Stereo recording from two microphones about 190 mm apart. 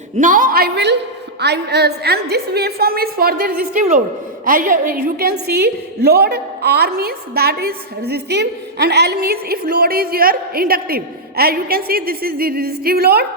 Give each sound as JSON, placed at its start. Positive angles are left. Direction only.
{"t": 0.2, "sound": "a woman's voice", "side_deg": -45}